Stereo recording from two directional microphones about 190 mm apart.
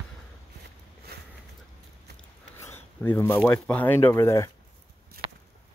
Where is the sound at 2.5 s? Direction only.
15° left (ahead or behind).